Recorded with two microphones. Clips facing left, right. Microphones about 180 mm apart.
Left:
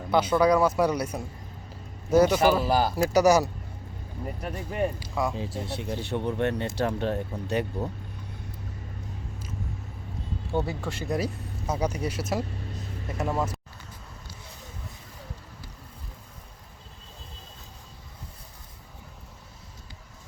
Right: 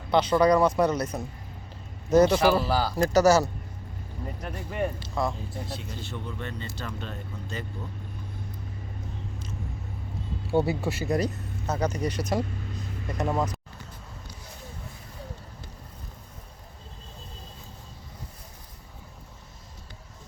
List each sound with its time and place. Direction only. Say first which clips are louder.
0.1 s speech: right 1 dB; 5° left (ahead or behind)
5.4 s speech: left 4 dB; 80° left
10.5 s a man's voice: right 4 dB; 10° right (ahead or behind)
11.2 s speech: right 2 dB; 10° left (ahead or behind)